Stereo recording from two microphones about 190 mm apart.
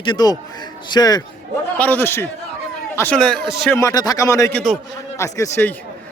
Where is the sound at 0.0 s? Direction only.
20° left (ahead or behind).